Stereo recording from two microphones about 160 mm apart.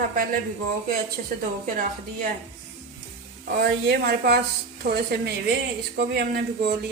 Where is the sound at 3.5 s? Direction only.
80° right.